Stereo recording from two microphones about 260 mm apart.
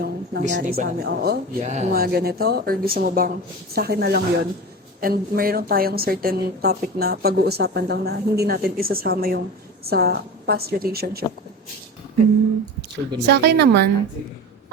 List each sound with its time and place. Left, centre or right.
0.0 s a woman's voice: right
13.2 s a woman's voice: right